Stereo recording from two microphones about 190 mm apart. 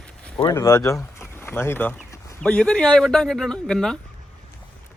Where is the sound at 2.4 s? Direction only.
5° left (ahead or behind).